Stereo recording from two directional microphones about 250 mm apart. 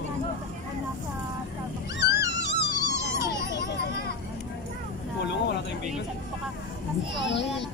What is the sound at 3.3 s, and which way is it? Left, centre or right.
Vehicle, left.